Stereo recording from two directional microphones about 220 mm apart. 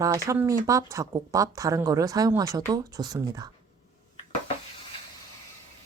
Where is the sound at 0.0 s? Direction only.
15° right (ahead or behind).